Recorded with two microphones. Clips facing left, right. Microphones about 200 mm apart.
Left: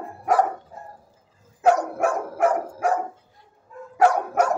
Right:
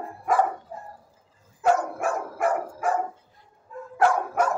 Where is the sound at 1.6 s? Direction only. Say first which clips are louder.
Left 3 dB; 70° left (ahead or behind).